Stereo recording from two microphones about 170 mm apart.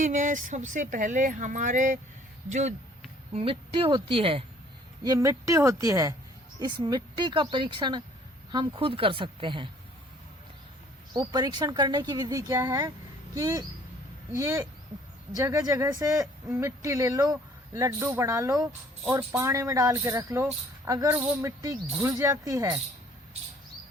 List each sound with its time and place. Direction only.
0.0 s speech: 45° right (ahead or behind)
5.0 s speech: 20° right (ahead or behind)
11.1 s speech: 25° right (ahead or behind)
19.0 s speech: 10° right (ahead or behind)